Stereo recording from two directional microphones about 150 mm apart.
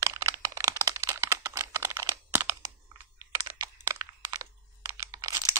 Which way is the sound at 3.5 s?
20° right (ahead or behind).